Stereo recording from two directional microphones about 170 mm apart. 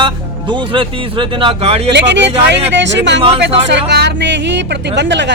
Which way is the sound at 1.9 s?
85° right.